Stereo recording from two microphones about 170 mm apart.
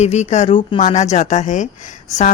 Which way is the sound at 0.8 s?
45° left (ahead or behind).